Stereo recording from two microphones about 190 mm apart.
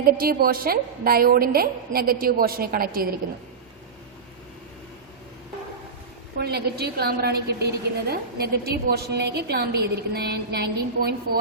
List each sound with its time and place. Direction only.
0.0 s a woman's voice: 50° right (ahead or behind)
6.3 s a woman's voice: 55° right (ahead or behind)